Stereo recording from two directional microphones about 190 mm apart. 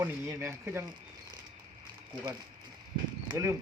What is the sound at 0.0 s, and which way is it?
Speech, 10° right (ahead or behind).